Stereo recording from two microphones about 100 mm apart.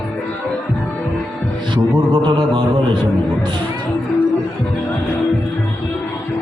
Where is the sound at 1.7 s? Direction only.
55° right (ahead or behind).